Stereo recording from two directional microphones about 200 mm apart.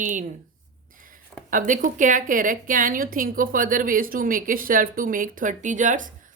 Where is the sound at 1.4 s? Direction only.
40° right (ahead or behind).